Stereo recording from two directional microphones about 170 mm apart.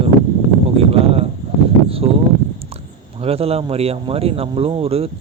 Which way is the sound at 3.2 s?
35° right (ahead or behind).